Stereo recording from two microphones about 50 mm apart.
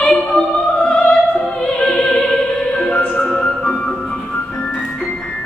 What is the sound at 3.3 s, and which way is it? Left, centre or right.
Music, centre.